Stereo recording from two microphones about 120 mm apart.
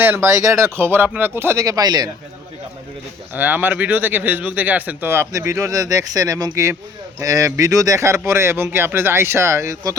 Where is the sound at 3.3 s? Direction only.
15° right (ahead or behind).